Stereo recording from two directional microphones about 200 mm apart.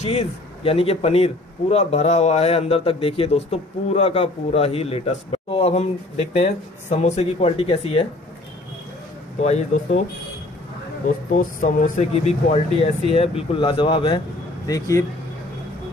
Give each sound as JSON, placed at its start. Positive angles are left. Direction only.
{"t": 0.0, "sound": "speech", "side_deg": 30}
{"t": 9.4, "sound": "speech", "side_deg": 35}
{"t": 11.3, "sound": "speech", "side_deg": 40}